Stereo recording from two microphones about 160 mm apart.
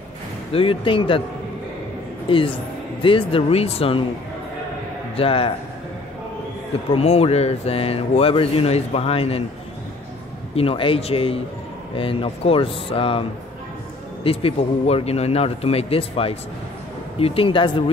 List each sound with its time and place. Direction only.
0.5 s speech: 35° left (ahead or behind)
2.2 s a woman's voice: 35° left (ahead or behind)
5.1 s speech: 35° left (ahead or behind)
6.9 s speech: 40° left (ahead or behind)
10.5 s speech: 35° left (ahead or behind)
14.2 s speech: 40° left (ahead or behind)